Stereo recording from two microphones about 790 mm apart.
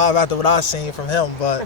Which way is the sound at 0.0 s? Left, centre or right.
Left.